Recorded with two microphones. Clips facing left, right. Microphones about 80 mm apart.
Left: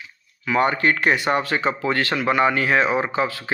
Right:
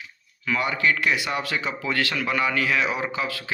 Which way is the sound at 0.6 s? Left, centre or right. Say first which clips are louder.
Left 5 dB; left.